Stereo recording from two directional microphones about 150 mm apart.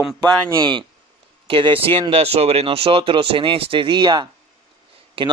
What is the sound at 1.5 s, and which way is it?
A man's voice, 35° right (ahead or behind).